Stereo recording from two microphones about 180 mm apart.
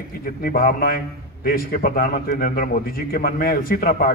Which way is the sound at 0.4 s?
55° left (ahead or behind).